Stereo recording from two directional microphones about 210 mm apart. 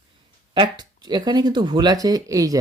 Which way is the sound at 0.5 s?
20° right (ahead or behind).